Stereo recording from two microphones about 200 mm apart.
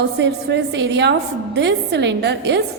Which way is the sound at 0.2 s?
60° right (ahead or behind).